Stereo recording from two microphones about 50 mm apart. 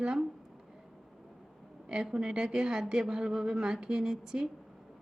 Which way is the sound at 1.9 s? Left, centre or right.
Centre.